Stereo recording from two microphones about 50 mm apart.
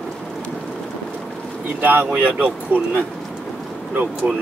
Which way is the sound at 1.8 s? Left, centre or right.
Right.